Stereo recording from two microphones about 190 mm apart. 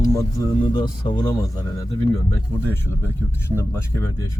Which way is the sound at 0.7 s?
25° left (ahead or behind).